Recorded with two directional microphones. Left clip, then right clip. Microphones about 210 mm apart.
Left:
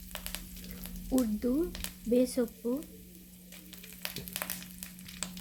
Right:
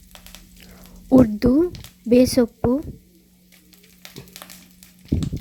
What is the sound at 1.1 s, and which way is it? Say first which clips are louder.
Speech: right 15 dB; 35° right (ahead or behind).